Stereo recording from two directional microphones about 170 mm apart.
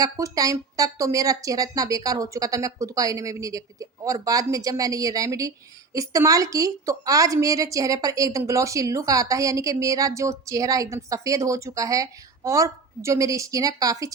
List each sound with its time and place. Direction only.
0.0 s speech: 20° right (ahead or behind)